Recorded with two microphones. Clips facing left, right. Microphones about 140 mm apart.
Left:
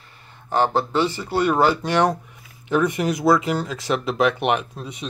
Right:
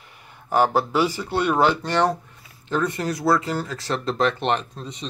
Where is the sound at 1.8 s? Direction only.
15° left (ahead or behind).